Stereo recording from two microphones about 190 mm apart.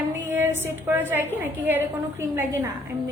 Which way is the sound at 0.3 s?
10° right (ahead or behind).